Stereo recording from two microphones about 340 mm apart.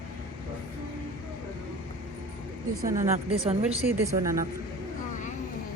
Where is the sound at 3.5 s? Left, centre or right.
Centre.